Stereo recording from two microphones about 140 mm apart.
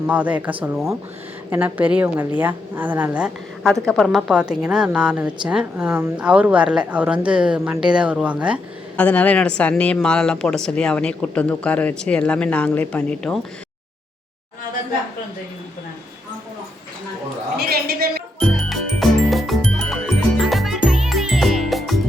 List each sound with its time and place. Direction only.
0.1 s a woman's voice: 10° right (ahead or behind)
9.0 s speech: 10° left (ahead or behind)
17.6 s a sound: 90° right
18.3 s music: centre (ahead or behind)